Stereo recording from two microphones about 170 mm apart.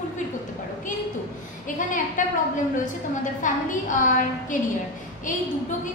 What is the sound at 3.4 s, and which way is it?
Speech, 50° left (ahead or behind).